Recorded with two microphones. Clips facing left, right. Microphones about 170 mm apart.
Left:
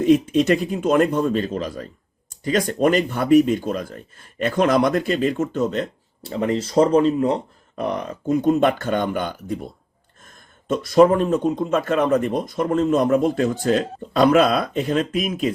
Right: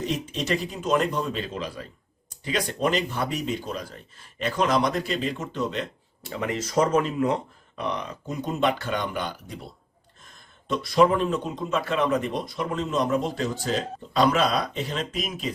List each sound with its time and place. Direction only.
0.0 s speech: 55° left (ahead or behind); by 7.4 s 30° left (ahead or behind)
7.8 s speech: 45° left (ahead or behind)